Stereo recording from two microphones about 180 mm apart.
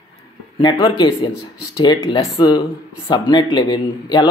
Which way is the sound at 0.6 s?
25° left (ahead or behind).